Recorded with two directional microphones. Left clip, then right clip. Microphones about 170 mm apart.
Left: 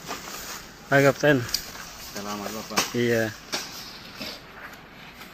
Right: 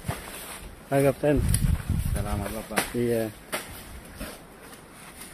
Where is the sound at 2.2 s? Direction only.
65° right (ahead or behind).